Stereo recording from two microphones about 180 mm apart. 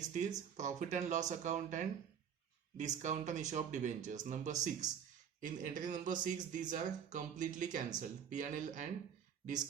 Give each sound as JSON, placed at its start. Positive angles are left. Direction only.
{"t": 0.1, "sound": "speech", "side_deg": -40}